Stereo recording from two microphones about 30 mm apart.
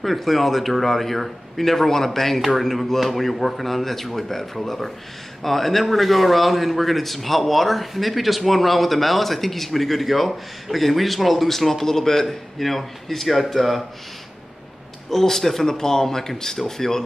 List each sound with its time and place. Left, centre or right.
0.0 s a man's voice: centre
15.0 s speech: centre